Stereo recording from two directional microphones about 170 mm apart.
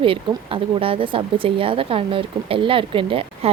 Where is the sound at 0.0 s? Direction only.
30° right (ahead or behind).